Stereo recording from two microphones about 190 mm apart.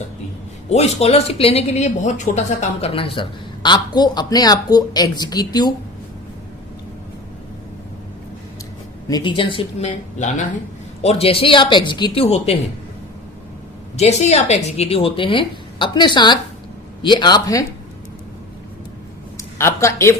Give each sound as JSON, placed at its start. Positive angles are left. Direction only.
{"t": 0.7, "sound": "a woman's voice", "side_deg": 35}
{"t": 9.0, "sound": "a woman's voice", "side_deg": 25}
{"t": 13.9, "sound": "a woman's voice", "side_deg": 35}
{"t": 19.4, "sound": "a sound", "side_deg": 15}